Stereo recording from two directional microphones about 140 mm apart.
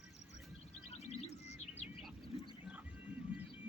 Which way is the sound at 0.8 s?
50° left (ahead or behind).